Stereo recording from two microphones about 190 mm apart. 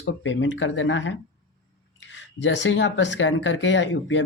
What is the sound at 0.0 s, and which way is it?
Speech, 80° left.